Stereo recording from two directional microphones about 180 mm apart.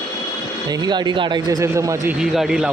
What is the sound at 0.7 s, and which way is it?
Speech, 25° right (ahead or behind).